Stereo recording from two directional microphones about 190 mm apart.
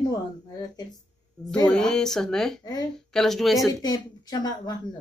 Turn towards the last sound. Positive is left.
turn(degrees=20)  # may be behind; listen again after turning